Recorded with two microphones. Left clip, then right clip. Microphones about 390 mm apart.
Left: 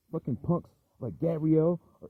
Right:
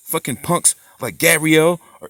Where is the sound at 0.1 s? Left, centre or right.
Right.